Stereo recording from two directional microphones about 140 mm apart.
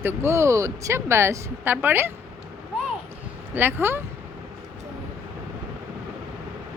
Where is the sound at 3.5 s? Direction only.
15° right (ahead or behind).